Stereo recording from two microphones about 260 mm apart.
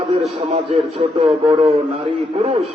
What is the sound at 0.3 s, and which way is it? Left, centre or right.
A man's voice, right.